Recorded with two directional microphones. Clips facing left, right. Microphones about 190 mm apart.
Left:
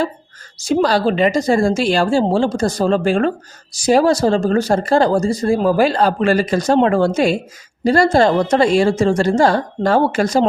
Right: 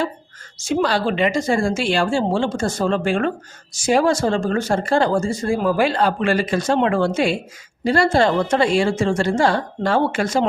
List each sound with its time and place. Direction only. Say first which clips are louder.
0.6 s a woman's voice: left 4 dB; 35° left (ahead or behind)